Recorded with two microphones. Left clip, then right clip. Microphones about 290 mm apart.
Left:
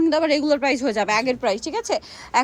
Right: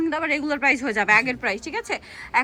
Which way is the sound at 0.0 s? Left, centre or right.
Centre.